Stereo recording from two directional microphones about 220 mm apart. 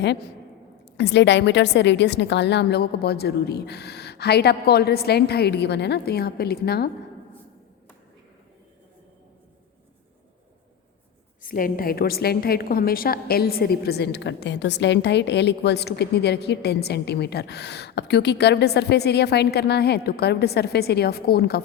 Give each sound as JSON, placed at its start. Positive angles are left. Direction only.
{"t": 0.9, "sound": "a woman's voice", "side_deg": 50}
{"t": 11.4, "sound": "a woman's voice", "side_deg": 40}